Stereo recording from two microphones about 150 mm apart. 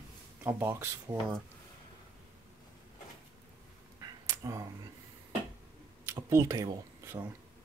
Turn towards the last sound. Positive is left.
turn(degrees=-20)  # may be behind; listen again after turning